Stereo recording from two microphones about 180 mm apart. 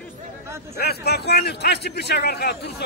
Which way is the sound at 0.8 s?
60° left (ahead or behind).